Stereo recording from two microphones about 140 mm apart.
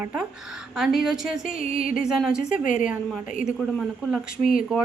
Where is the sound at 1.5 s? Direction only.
80° left.